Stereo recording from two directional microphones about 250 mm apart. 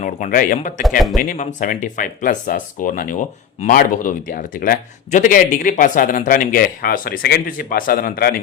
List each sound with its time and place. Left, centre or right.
0.0 s speech: left
0.8 s speech: centre
1.2 s speech: left